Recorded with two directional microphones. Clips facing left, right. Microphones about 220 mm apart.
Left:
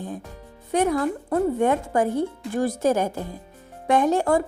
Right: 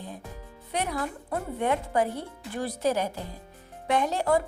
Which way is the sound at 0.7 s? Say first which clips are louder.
Left 9 dB; 50° left (ahead or behind).